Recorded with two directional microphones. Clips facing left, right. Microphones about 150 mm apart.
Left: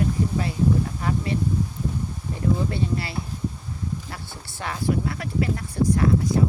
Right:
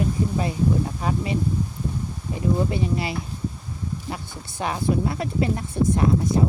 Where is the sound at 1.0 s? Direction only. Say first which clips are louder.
Right 1 dB; 20° right (ahead or behind).